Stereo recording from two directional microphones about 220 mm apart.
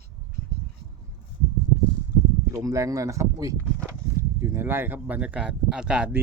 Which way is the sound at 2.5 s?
15° right (ahead or behind).